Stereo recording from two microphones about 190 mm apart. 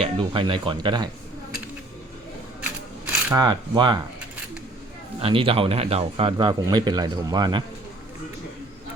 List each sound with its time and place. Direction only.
0.0 s speech: 30° right (ahead or behind)
3.3 s speech: 20° right (ahead or behind)
5.2 s speech: 30° right (ahead or behind)